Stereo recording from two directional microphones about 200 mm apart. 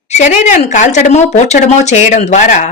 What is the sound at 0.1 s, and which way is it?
A woman's voice, 35° left (ahead or behind).